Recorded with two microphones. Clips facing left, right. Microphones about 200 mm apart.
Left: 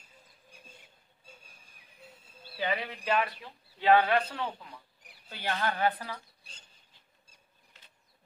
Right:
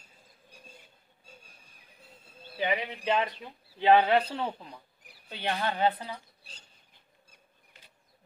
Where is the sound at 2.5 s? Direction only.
15° right (ahead or behind).